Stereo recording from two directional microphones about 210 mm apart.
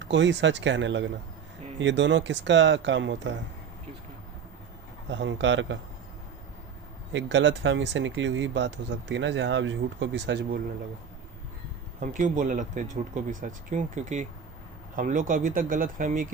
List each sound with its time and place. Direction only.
0.0 s speech: 60° right (ahead or behind)
5.0 s speech: 60° right (ahead or behind)
7.1 s speech: 60° right (ahead or behind)
11.9 s speech: 35° right (ahead or behind)